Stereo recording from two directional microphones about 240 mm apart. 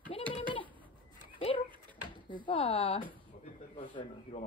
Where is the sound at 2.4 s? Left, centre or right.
Left.